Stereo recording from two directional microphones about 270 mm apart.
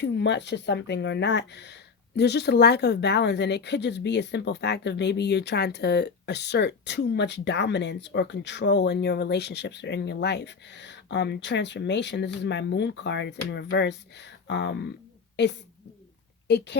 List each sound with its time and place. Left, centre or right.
0.0 s speech: left
16.5 s a woman's voice: left